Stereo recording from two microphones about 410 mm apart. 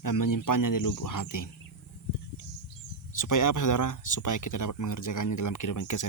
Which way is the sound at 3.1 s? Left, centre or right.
Left.